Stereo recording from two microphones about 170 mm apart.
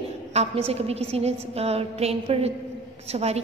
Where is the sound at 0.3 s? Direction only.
35° right (ahead or behind).